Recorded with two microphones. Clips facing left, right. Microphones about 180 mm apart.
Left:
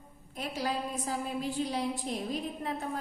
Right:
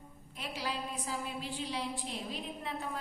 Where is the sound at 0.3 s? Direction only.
45° left (ahead or behind).